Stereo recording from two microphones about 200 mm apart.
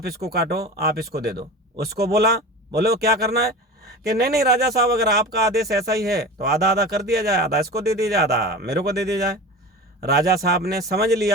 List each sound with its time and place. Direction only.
0.0 s speech: 50° right (ahead or behind)